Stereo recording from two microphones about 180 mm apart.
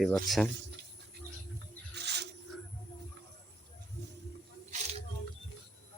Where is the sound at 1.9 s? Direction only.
70° right (ahead or behind).